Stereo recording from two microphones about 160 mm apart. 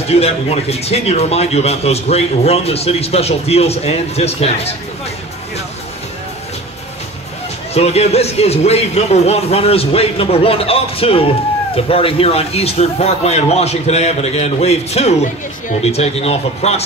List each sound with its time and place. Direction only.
0.1 s speech: 40° left (ahead or behind)
7.7 s speech: 40° left (ahead or behind)